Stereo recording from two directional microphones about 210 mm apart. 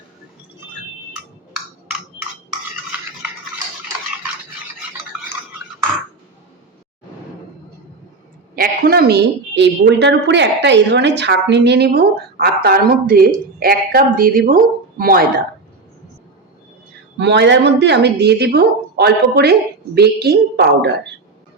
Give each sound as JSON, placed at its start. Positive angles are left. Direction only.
{"t": 5.1, "sound": "a sound", "side_deg": -5}
{"t": 8.5, "sound": "a woman's voice", "side_deg": -45}
{"t": 17.2, "sound": "speech", "side_deg": -55}